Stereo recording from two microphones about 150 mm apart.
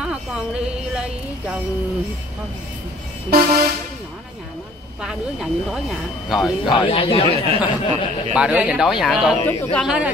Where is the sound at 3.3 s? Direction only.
90° right.